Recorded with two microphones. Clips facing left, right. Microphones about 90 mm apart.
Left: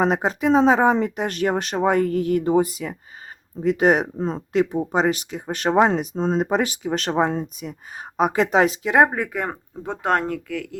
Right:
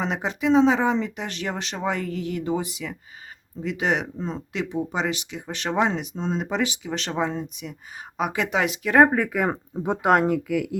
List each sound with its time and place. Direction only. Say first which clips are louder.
0.0 s speech: left 5 dB; 45° left (ahead or behind)
8.8 s speech: even; 15° left (ahead or behind)
9.3 s speech: right 3 dB; 5° right (ahead or behind)